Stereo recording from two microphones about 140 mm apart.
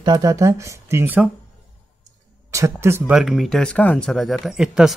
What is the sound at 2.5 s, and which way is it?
Speech, 20° right (ahead or behind).